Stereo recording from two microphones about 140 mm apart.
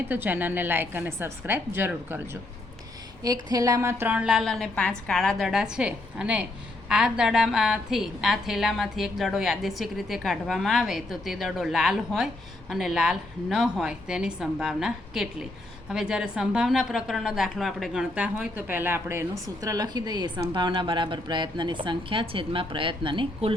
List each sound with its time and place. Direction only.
0.1 s a woman's voice: 15° right (ahead or behind)
3.2 s a woman's voice: 25° right (ahead or behind)